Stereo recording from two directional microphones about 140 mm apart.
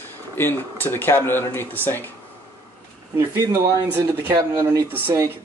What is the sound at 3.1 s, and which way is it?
Speech, 20° right (ahead or behind).